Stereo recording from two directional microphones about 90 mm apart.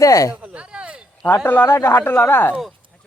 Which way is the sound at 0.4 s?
10° right (ahead or behind).